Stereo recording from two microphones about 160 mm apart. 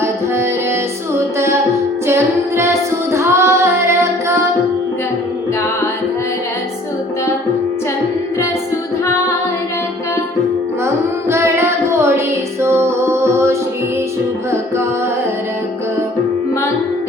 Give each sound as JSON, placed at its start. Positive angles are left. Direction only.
{"t": 0.0, "sound": "music", "side_deg": -15}
{"t": 2.0, "sound": "music", "side_deg": -15}
{"t": 10.8, "sound": "music", "side_deg": -15}